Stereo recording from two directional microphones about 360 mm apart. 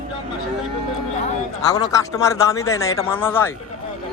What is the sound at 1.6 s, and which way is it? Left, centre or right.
A man's voice, centre.